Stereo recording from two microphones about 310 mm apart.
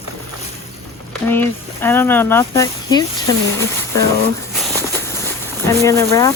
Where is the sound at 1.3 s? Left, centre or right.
Centre.